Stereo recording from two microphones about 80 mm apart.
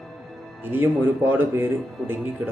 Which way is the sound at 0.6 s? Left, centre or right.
Right.